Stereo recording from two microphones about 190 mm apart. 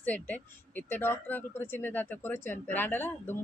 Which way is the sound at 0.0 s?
10° left (ahead or behind).